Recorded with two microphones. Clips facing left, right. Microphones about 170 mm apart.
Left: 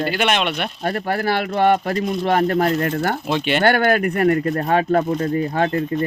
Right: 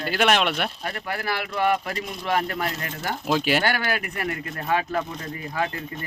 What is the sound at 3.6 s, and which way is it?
A man's voice, 60° left (ahead or behind).